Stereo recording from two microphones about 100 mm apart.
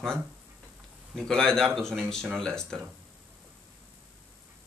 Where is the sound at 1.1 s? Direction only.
5° left (ahead or behind).